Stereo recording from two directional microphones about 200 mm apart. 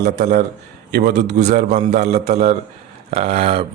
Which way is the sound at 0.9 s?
50° right (ahead or behind).